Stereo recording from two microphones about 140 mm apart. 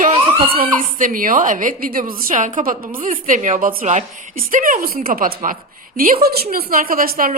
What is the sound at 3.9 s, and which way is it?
A woman's voice, 65° right (ahead or behind).